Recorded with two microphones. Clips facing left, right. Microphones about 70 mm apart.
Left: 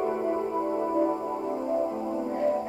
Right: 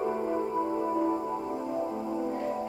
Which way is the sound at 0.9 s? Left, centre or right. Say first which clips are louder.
Left 2 dB; centre.